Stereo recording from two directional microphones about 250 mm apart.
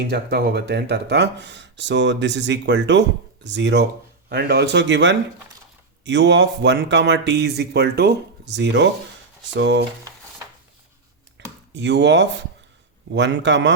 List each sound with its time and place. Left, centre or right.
0.1 s speech: right
11.7 s speech: right